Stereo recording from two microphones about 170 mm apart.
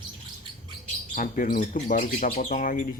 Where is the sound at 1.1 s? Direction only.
50° left (ahead or behind).